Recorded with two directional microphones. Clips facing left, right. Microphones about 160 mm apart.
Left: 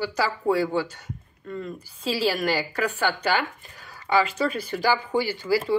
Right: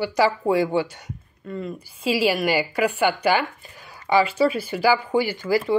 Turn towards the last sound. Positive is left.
turn(degrees=-15)  # may be behind; listen again after turning